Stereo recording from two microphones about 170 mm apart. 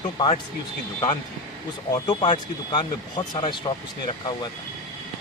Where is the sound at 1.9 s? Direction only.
25° left (ahead or behind).